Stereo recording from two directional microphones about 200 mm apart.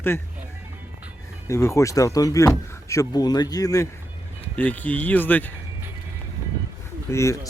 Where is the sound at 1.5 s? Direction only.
15° left (ahead or behind).